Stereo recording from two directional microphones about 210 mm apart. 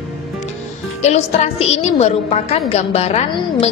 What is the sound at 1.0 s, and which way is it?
A woman's voice, 30° left (ahead or behind).